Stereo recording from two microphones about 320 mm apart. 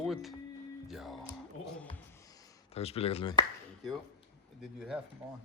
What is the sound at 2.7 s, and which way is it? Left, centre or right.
Speech, centre.